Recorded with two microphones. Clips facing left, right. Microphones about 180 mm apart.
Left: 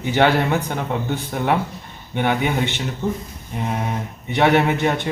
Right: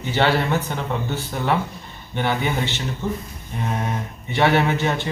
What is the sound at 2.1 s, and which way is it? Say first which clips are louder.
Speech: left 3 dB; 15° left (ahead or behind).